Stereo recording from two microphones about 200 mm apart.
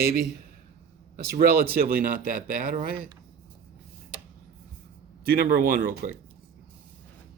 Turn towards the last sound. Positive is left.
turn(degrees=-45)  # may be behind; listen again after turning